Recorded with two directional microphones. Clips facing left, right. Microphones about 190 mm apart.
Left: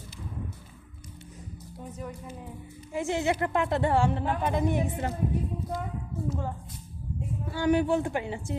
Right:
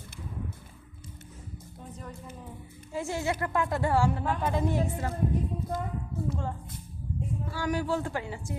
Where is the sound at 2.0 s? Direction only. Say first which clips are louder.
Left 4 dB; 10° left (ahead or behind).